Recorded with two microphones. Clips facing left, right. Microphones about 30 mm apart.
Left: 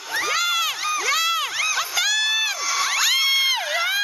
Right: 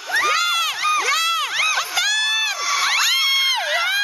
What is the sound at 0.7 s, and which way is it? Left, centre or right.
Crowd, right.